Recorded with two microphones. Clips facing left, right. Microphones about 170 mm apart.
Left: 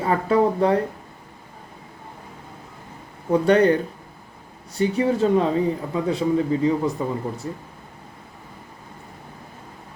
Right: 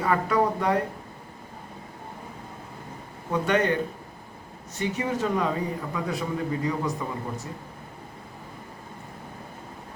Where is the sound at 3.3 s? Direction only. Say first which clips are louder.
Left 7 dB; 35° left (ahead or behind).